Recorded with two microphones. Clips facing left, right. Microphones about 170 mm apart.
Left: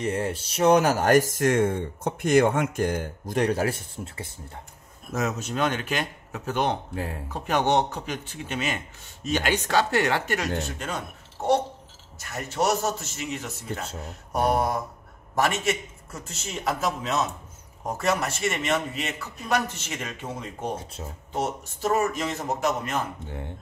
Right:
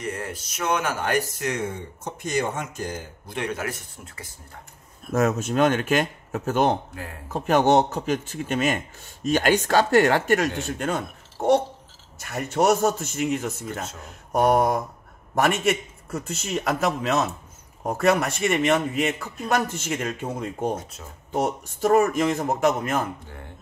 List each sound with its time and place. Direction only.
0.0 s speech: 30° left (ahead or behind)
5.1 s a man's voice: 50° right (ahead or behind)
23.2 s speech: 20° left (ahead or behind)